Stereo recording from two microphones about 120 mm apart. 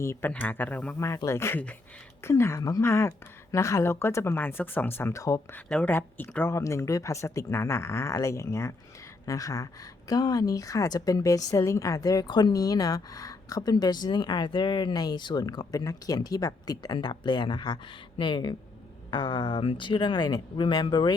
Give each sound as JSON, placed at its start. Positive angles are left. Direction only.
{"t": 0.0, "sound": "speech", "side_deg": 20}
{"t": 0.9, "sound": "speech", "side_deg": 25}
{"t": 5.6, "sound": "a woman's voice", "side_deg": 10}